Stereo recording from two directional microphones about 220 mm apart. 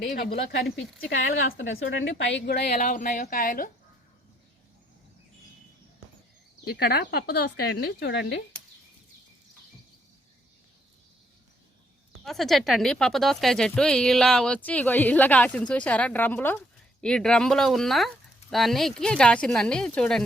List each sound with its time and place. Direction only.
0.1 s speech: 40° left (ahead or behind)
1.5 s a woman's voice: 65° left (ahead or behind)
2.6 s speech: 35° left (ahead or behind)
6.7 s a woman's voice: 45° left (ahead or behind)
12.2 s speech: centre (ahead or behind)